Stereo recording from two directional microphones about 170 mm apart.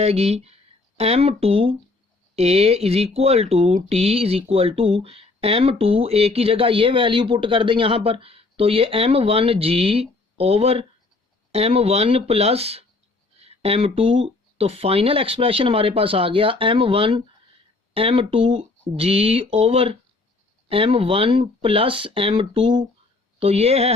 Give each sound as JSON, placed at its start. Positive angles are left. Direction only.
{"t": 0.0, "sound": "speech", "side_deg": -40}